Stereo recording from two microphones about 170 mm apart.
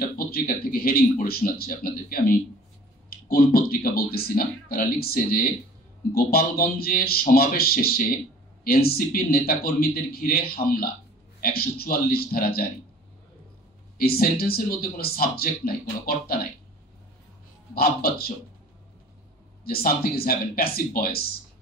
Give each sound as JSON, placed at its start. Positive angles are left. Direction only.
{"t": 0.3, "sound": "speech", "side_deg": 60}
{"t": 13.9, "sound": "speech", "side_deg": 60}
{"t": 17.7, "sound": "speech", "side_deg": 65}
{"t": 19.6, "sound": "speech", "side_deg": 60}